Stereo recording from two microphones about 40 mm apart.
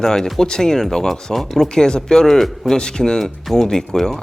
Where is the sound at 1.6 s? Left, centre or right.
Centre.